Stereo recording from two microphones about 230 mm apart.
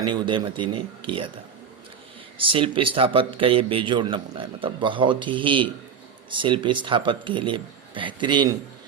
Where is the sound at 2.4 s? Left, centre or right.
Right.